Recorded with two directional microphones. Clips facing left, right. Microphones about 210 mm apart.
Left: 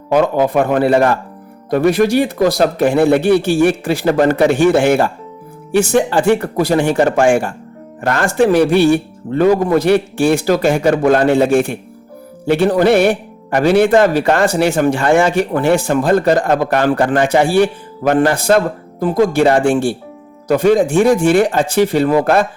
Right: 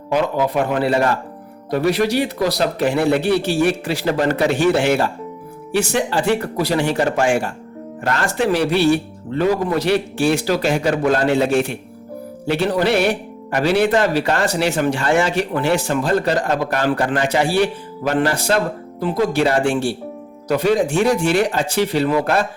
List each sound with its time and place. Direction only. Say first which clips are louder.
0.1 s speech: left 5 dB; 50° left (ahead or behind)